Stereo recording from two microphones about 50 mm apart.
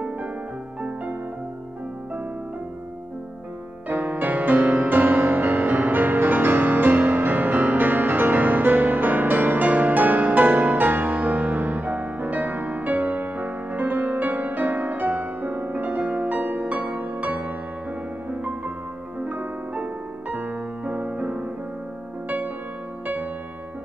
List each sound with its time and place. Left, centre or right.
3.9 s music: right
19.1 s music: right